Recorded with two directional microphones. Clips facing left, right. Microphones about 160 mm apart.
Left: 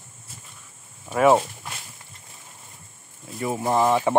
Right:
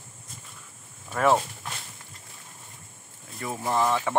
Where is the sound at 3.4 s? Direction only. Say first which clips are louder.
Left 4 dB; 20° left (ahead or behind).